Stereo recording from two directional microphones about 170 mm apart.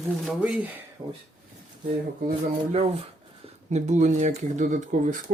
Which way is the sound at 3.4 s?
45° right (ahead or behind).